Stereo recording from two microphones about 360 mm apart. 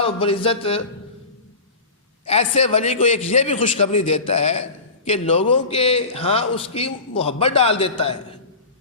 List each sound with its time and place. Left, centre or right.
0.0 s a man's voice: centre
2.2 s a man's voice: centre